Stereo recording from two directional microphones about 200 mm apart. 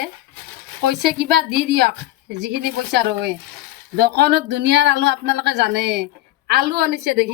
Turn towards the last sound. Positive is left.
turn(degrees=-55)  # may be behind; listen again after turning